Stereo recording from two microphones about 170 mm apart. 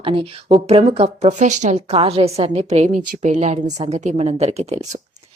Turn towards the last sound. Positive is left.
turn(degrees=-40)  # may be behind; listen again after turning